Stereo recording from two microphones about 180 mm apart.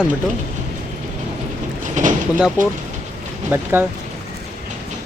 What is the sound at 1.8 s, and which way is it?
Boat, 45° right (ahead or behind).